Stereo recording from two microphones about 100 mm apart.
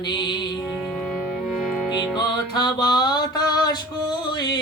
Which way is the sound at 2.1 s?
50° left (ahead or behind).